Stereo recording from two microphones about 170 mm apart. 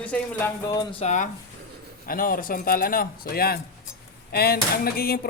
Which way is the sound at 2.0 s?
55° left (ahead or behind).